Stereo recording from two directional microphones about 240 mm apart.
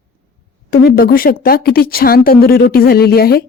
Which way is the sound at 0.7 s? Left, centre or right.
Left.